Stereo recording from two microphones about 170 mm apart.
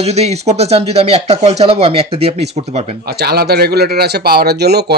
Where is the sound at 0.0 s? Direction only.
40° right (ahead or behind).